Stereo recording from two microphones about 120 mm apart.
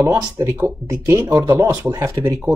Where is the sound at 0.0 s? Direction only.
20° right (ahead or behind).